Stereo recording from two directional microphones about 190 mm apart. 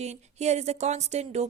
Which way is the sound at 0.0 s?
35° right (ahead or behind).